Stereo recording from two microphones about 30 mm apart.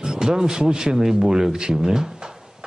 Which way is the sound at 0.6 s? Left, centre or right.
Right.